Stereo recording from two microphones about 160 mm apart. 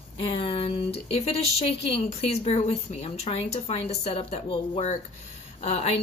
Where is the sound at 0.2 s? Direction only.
35° left (ahead or behind).